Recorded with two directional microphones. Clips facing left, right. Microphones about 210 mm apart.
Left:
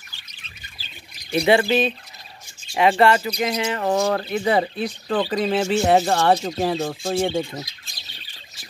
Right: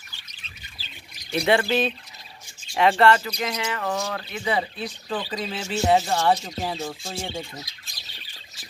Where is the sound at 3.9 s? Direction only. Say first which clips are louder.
Left 9 dB; 45° left (ahead or behind); by 7.5 s 65° left (ahead or behind).